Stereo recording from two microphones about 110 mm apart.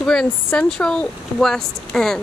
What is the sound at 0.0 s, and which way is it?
Speech, 5° left (ahead or behind).